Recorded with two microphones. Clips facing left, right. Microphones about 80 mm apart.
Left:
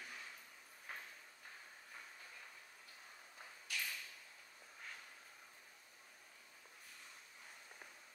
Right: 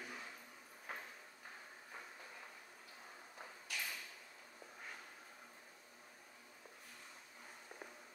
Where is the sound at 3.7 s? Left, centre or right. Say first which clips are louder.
Even; centre.